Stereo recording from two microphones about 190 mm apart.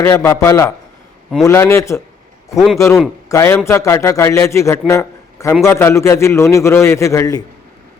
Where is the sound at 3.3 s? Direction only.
15° left (ahead or behind).